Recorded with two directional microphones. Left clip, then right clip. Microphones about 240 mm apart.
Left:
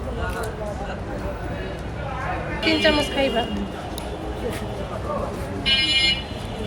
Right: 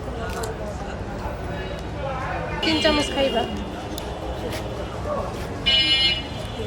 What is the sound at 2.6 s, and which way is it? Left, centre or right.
Speech, centre.